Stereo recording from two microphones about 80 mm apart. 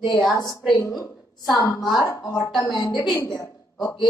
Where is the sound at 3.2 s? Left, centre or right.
Left.